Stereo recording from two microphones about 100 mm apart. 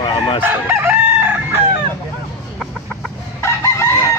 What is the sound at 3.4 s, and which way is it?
Chicken, 25° left (ahead or behind).